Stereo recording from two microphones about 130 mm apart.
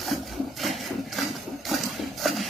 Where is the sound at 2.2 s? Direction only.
Centre (ahead or behind).